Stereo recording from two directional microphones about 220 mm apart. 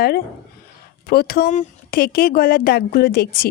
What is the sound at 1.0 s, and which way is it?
Speech, 45° left (ahead or behind).